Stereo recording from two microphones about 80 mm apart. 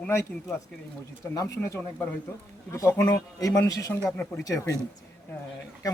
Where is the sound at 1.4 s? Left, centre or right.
Left.